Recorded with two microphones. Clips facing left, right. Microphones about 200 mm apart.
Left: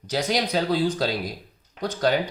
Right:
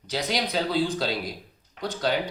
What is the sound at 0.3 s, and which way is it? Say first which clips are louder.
Speech: left 4 dB; 45° left (ahead or behind).